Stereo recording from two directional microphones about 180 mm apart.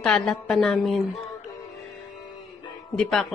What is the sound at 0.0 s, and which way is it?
Speech, 5° left (ahead or behind).